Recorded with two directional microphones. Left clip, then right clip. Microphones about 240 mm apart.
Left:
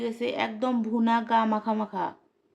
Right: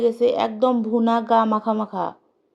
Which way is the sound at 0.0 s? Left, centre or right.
Centre.